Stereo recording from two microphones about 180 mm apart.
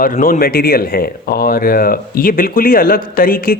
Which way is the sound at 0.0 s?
50° left (ahead or behind).